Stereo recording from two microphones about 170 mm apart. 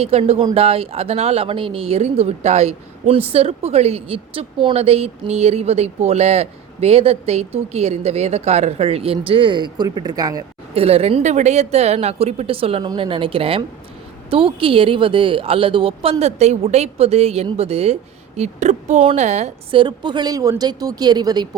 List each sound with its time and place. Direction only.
0.0 s a woman's voice: 35° right (ahead or behind)
10.8 s a woman's voice: 35° right (ahead or behind)
19.8 s a woman's voice: 25° right (ahead or behind)